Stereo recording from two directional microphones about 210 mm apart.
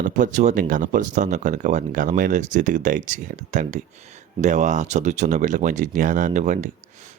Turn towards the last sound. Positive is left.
turn(degrees=-35)  # may be behind; listen again after turning